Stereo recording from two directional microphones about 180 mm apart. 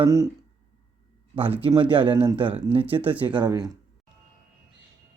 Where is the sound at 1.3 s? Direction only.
30° right (ahead or behind).